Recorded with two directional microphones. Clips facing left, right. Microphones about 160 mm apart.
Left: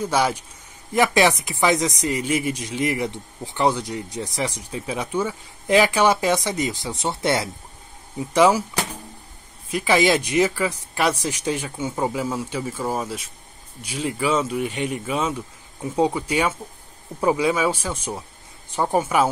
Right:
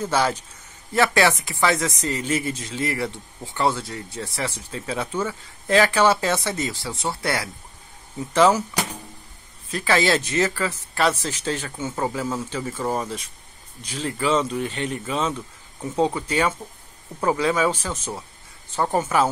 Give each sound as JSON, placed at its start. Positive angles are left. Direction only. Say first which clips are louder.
{"t": 0.0, "sound": "speech", "louder": "left 1 dB", "side_deg": 10}
{"t": 9.7, "sound": "speech", "louder": "left 2 dB", "side_deg": 15}